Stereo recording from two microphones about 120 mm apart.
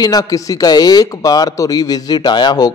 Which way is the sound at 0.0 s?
30° left (ahead or behind).